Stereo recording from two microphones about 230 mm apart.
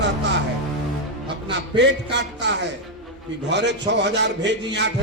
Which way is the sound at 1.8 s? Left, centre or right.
Right.